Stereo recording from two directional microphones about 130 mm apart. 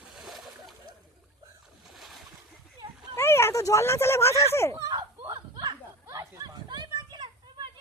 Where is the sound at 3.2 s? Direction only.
20° left (ahead or behind).